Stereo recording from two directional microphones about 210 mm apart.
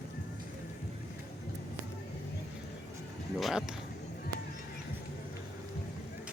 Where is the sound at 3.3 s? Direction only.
Centre (ahead or behind).